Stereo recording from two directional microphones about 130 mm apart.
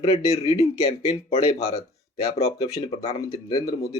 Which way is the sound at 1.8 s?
25° left (ahead or behind).